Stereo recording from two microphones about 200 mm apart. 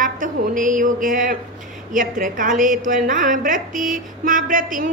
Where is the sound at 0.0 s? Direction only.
40° right (ahead or behind).